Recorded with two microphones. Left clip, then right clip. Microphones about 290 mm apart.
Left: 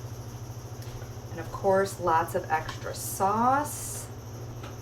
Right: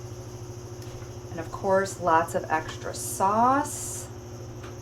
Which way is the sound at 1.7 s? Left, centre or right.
Centre.